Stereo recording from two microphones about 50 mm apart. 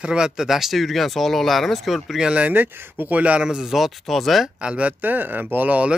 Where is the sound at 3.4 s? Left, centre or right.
Centre.